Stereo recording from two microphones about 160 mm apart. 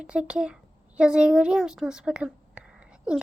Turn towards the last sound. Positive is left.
turn(degrees=-5)  # may be behind; listen again after turning